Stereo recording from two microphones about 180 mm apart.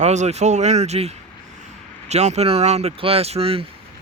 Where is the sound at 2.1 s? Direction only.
40° right (ahead or behind).